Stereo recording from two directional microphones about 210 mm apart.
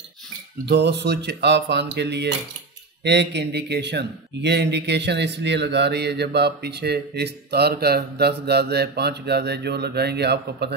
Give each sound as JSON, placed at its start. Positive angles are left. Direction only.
{"t": 0.7, "sound": "speech", "side_deg": -55}